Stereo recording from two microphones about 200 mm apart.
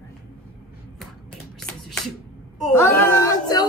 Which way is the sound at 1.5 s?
5° left (ahead or behind).